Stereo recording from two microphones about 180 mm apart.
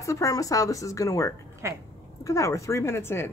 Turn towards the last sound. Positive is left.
turn(degrees=15)  # may be behind; listen again after turning